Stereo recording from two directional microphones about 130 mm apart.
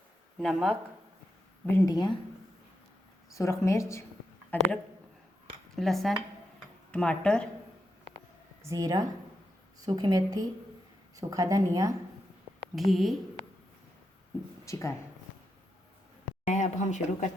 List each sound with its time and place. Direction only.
0.3 s a woman's voice: 5° left (ahead or behind)
1.8 s speech: 30° left (ahead or behind)
3.3 s speech: 20° left (ahead or behind)
5.7 s a woman's voice: centre (ahead or behind)
8.6 s a woman's voice: 25° right (ahead or behind)
12.7 s a woman's voice: centre (ahead or behind)
14.6 s speech: 20° left (ahead or behind)
16.5 s speech: 70° left (ahead or behind)